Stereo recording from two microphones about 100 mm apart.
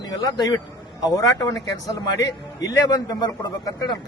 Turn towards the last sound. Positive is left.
turn(degrees=45)  # may be behind; listen again after turning